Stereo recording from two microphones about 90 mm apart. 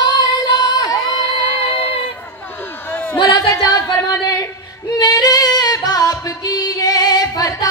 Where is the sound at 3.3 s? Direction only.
40° left (ahead or behind).